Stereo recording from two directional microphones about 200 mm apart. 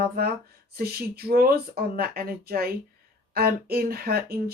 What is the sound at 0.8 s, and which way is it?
Speech, 50° right (ahead or behind).